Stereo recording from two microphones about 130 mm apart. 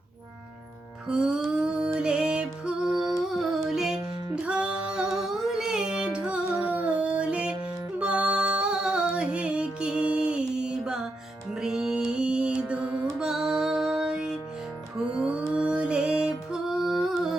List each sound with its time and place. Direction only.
1.0 s music: 5° right (ahead or behind)
2.9 s humming: 30° right (ahead or behind)
3.2 s music: centre (ahead or behind)